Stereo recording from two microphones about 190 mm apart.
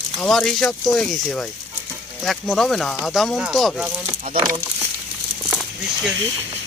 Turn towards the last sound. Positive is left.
turn(degrees=0)  # may be behind; listen again after turning